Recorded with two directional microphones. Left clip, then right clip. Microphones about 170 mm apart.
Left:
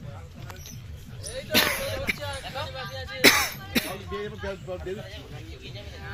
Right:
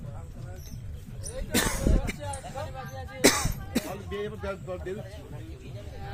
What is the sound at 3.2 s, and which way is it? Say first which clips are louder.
Speech: left 5 dB; 10° right (ahead or behind).